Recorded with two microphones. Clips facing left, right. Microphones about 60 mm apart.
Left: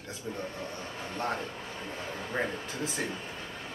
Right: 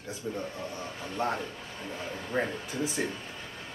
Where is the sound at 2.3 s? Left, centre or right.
Left.